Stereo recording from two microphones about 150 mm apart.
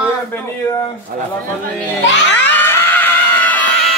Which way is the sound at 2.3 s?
10° left (ahead or behind).